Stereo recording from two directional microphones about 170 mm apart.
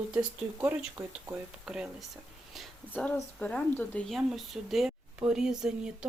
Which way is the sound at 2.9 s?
10° left (ahead or behind).